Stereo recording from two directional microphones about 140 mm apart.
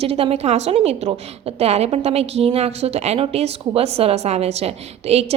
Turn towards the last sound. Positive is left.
turn(degrees=-45)  # may be behind; listen again after turning